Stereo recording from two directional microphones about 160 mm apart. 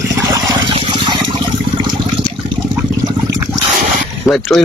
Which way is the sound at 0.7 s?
35° right (ahead or behind).